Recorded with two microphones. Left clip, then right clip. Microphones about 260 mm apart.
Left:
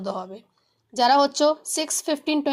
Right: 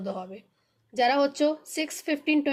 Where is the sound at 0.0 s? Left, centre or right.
Centre.